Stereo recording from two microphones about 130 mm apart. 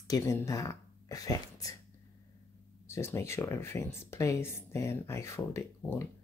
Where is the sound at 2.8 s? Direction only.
20° left (ahead or behind).